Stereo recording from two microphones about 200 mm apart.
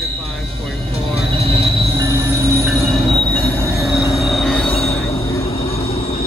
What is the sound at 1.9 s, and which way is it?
Train wheels squealing, 15° right (ahead or behind).